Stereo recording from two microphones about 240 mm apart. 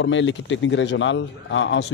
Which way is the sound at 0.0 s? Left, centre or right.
Left.